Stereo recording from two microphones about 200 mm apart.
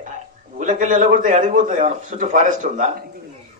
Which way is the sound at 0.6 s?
40° right (ahead or behind).